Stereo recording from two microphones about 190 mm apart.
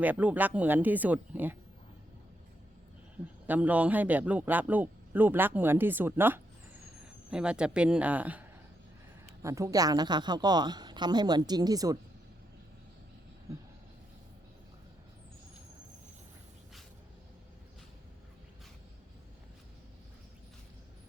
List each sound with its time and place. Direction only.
0.0 s a man's voice: 10° right (ahead or behind)
3.4 s a man's voice: 10° right (ahead or behind)